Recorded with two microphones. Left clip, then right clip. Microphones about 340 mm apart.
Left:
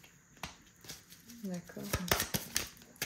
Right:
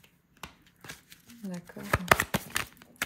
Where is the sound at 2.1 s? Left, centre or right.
Centre.